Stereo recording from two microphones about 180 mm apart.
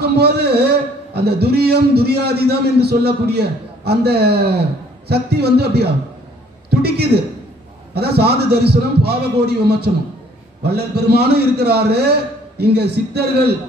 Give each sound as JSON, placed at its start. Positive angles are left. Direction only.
{"t": 0.0, "sound": "a man's voice", "side_deg": -65}